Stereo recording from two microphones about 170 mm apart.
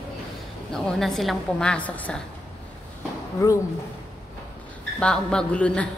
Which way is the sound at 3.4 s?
20° left (ahead or behind).